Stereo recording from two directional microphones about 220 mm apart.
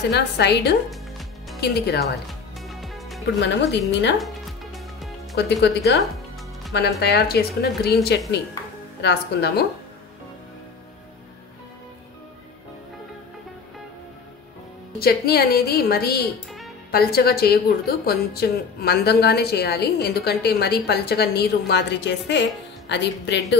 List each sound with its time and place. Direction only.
0.1 s a woman's voice: 50° left (ahead or behind)
0.8 s music: centre (ahead or behind)
1.6 s a woman's voice: 45° left (ahead or behind)
2.2 s music: centre (ahead or behind)
3.3 s a woman's voice: 55° left (ahead or behind)
4.2 s music: centre (ahead or behind)
6.7 s a woman's voice: 50° left (ahead or behind)
15.0 s a woman's voice: 45° left (ahead or behind)